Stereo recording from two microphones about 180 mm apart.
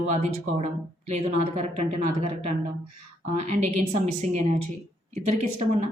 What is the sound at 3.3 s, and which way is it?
Speech, 40° right (ahead or behind).